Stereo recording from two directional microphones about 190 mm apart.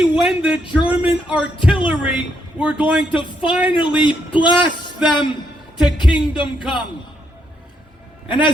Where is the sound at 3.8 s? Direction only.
25° left (ahead or behind).